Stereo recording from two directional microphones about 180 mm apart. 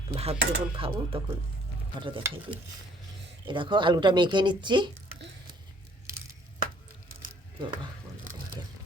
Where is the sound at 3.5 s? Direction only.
25° right (ahead or behind).